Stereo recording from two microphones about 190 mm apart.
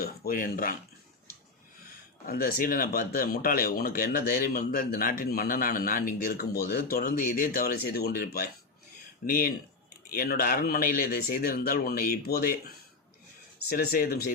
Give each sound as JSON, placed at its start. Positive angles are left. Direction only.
{"t": 0.0, "sound": "speech", "side_deg": 50}
{"t": 2.2, "sound": "speech", "side_deg": 50}